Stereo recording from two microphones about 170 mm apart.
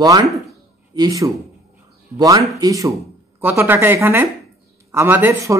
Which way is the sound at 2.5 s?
20° right (ahead or behind).